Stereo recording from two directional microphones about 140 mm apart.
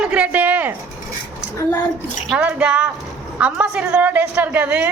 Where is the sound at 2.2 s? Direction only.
10° right (ahead or behind).